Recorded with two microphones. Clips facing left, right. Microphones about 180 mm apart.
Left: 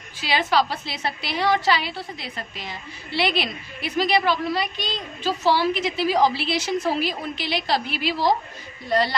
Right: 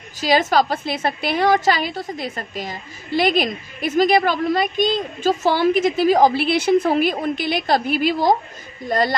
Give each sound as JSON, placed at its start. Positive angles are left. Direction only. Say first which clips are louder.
{"t": 0.2, "sound": "a woman's voice", "louder": "right 5 dB", "side_deg": -45}